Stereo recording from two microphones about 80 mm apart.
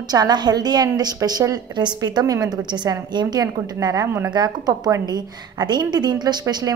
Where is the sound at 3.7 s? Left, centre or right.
Right.